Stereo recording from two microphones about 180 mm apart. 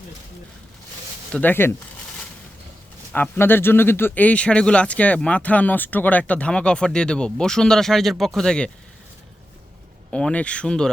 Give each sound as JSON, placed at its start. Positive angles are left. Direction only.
{"t": 1.3, "sound": "speech", "side_deg": 10}
{"t": 3.1, "sound": "speech", "side_deg": 10}
{"t": 10.1, "sound": "speech", "side_deg": 5}